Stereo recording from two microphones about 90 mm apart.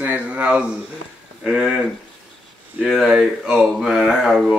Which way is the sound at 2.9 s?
Centre (ahead or behind).